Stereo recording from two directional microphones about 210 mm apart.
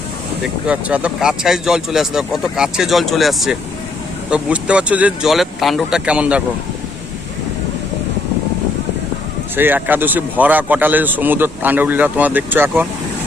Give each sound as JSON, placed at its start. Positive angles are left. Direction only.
{"t": 0.4, "sound": "speech", "side_deg": -5}
{"t": 9.6, "sound": "speech", "side_deg": -10}